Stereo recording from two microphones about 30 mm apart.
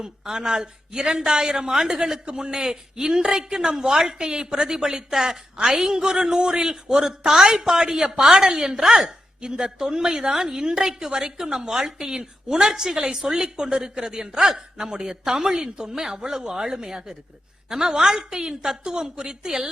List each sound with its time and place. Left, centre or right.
0.0 s a woman's voice: right
4.7 s a woman's voice: centre